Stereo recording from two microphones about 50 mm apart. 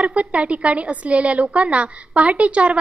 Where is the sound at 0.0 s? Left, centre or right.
Right.